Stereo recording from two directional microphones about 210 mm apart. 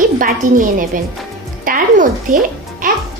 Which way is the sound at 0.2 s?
40° right (ahead or behind).